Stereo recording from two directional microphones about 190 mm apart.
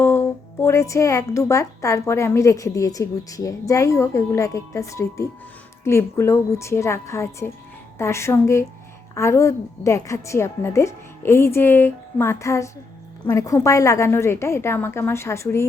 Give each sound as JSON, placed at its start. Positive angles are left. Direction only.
{"t": 0.0, "sound": "a woman's voice", "side_deg": 15}